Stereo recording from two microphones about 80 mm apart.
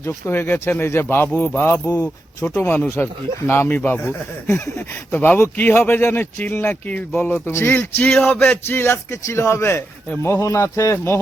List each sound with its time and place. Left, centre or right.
0.0 s speech: left
2.6 s speech: left
4.4 s speech: left
5.1 s speech: left